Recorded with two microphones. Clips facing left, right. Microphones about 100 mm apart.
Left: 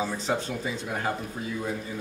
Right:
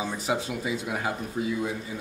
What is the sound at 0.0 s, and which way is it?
Speech, 10° right (ahead or behind).